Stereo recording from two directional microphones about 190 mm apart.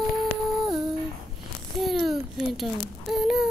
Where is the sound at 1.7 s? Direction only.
Centre (ahead or behind).